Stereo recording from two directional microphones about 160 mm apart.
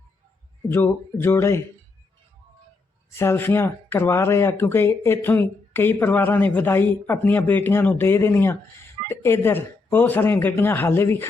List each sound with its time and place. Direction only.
0.7 s speech: 15° left (ahead or behind)
3.2 s speech: 15° left (ahead or behind)